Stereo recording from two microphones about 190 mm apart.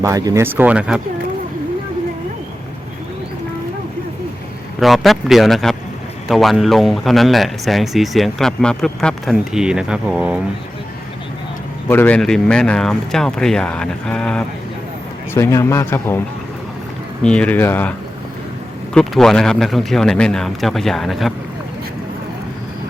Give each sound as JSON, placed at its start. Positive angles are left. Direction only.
{"t": 0.0, "sound": "speech", "side_deg": -20}
{"t": 4.8, "sound": "speech", "side_deg": 0}
{"t": 11.9, "sound": "a man's voice", "side_deg": 10}
{"t": 17.2, "sound": "a man's voice", "side_deg": 5}
{"t": 18.9, "sound": "speech", "side_deg": 0}